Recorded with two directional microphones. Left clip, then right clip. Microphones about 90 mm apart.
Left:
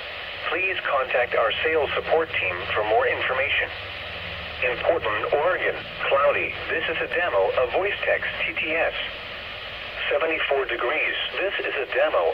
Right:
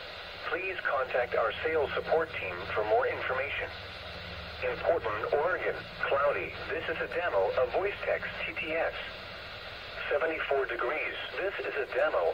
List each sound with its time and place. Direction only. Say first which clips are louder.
0.5 s speech: left 8 dB; 25° left (ahead or behind)
10.0 s speech: left 7 dB; 25° left (ahead or behind)